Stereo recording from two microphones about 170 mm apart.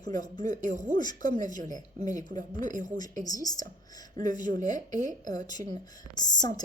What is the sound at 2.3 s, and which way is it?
Speech, 50° right (ahead or behind).